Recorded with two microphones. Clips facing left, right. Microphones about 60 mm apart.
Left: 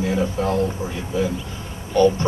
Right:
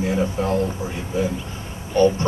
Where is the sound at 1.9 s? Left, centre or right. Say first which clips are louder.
Left 1 dB; right.